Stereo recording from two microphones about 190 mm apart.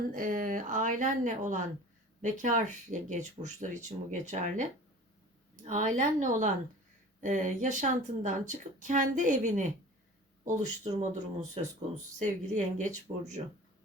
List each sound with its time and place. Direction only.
0.1 s speech: 45° right (ahead or behind)
5.6 s speech: 40° right (ahead or behind)